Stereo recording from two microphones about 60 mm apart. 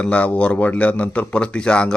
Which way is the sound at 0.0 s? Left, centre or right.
Left.